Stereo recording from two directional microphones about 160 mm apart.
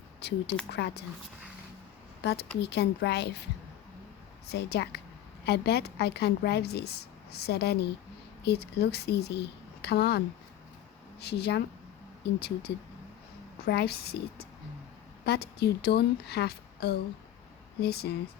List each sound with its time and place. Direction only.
0.2 s a woman's voice: 90° left
2.2 s a woman's voice: 90° left
4.4 s a woman's voice: 90° left
13.7 s a woman's voice: 85° left